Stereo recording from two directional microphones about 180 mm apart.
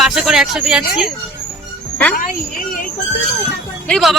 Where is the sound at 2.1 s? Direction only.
50° left (ahead or behind).